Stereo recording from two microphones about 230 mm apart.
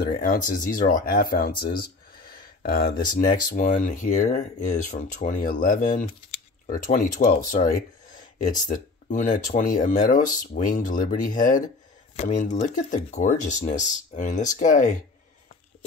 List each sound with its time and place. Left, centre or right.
0.0 s speech: left